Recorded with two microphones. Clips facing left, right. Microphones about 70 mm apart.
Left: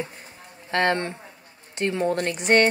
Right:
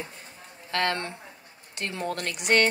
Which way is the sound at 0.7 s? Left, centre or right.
Left.